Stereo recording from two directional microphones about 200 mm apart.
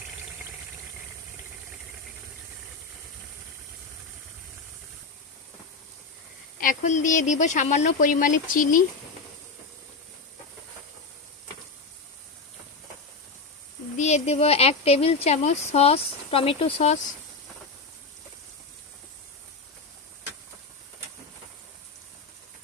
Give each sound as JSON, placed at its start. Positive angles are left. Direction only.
{"t": 6.6, "sound": "speech", "side_deg": 40}
{"t": 13.9, "sound": "speech", "side_deg": 35}